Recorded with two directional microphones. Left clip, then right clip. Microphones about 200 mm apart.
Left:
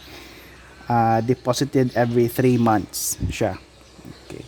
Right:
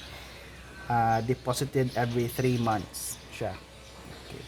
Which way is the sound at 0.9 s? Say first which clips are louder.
Left 7 dB; 45° left (ahead or behind).